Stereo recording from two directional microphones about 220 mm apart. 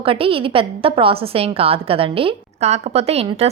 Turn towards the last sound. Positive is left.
turn(degrees=-25)  # may be behind; listen again after turning